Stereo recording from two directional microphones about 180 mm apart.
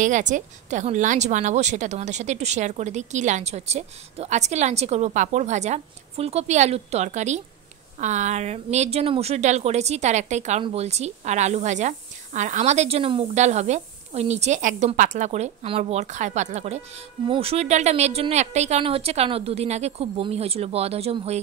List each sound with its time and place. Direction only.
0.0 s a woman's voice: 45° right (ahead or behind)